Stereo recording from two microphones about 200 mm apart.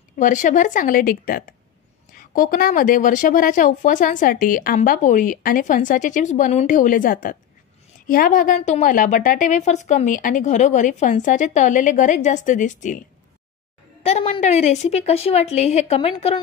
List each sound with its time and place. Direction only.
0.2 s a woman's voice: 40° left (ahead or behind)
14.0 s a woman's voice: 30° left (ahead or behind)